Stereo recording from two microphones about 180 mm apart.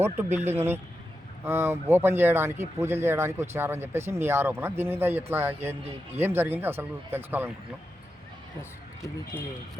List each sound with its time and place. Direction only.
0.0 s speech: 10° right (ahead or behind)
9.3 s speech: 10° left (ahead or behind)